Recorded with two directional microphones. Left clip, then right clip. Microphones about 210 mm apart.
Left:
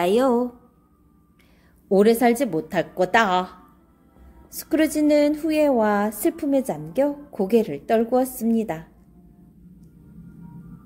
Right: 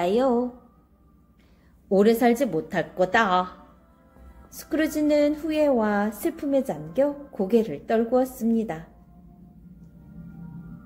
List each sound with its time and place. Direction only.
0.0 s a woman's voice: 35° left (ahead or behind)
1.9 s a woman's voice: 30° left (ahead or behind)